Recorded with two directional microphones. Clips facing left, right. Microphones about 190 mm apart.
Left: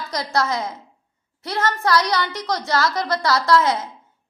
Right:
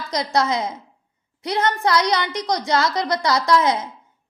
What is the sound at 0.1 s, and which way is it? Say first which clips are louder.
A woman's voice: right 2 dB; 20° right (ahead or behind).